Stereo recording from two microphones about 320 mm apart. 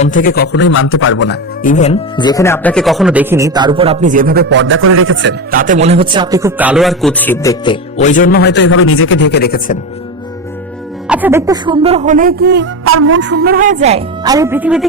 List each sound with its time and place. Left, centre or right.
0.0 s speech: left
11.1 s speech: centre